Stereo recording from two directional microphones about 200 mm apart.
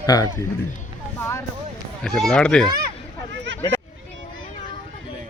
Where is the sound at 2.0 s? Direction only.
Centre (ahead or behind).